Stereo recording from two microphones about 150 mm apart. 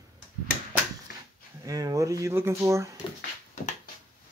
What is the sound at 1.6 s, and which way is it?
Speech, 25° right (ahead or behind).